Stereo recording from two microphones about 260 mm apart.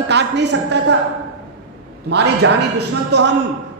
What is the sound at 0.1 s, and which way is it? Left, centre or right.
Speech, right.